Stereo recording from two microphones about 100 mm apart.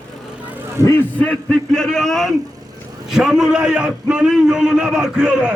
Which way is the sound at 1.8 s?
5° left (ahead or behind).